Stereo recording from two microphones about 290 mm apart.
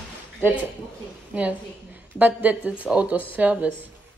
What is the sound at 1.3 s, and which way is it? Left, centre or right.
A woman's voice, centre.